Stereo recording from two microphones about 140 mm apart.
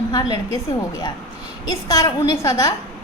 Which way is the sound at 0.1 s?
30° left (ahead or behind).